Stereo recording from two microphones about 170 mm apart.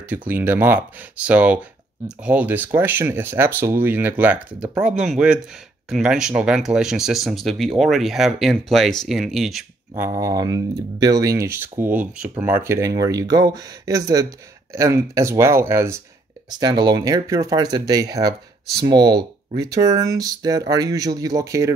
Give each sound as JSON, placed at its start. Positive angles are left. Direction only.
{"t": 0.1, "sound": "speech", "side_deg": -10}
{"t": 9.9, "sound": "speech", "side_deg": -15}
{"t": 18.9, "sound": "speech", "side_deg": -75}
{"t": 19.6, "sound": "speech", "side_deg": -20}